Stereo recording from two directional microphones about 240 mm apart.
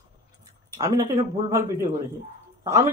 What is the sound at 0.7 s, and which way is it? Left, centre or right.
Speech, centre.